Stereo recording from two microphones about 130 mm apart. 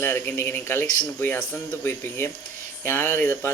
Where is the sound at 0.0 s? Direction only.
15° left (ahead or behind).